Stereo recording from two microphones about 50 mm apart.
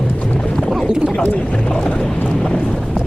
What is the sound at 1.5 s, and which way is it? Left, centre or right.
Speech, centre.